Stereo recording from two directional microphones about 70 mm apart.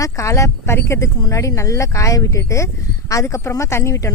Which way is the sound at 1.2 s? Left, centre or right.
Left.